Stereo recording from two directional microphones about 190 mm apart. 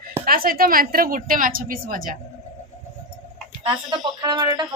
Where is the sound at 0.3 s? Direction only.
50° right (ahead or behind).